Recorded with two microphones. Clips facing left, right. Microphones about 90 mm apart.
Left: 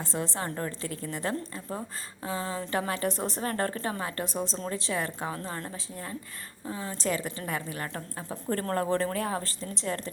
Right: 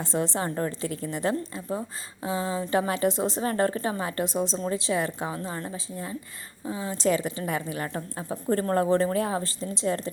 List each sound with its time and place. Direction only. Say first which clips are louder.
0.0 s a woman's voice: right 5 dB; 25° right (ahead or behind)